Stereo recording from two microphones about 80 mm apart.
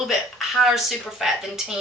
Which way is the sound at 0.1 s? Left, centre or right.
Centre.